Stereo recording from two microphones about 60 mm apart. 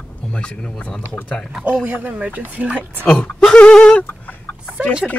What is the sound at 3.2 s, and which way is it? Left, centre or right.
Speech, centre.